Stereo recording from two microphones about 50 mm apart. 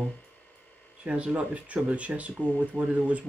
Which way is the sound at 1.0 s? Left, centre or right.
Right.